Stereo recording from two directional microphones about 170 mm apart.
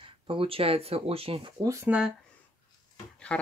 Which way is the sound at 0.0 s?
30° right (ahead or behind).